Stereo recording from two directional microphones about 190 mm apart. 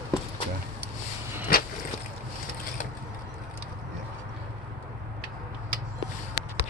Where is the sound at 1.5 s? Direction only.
50° left (ahead or behind).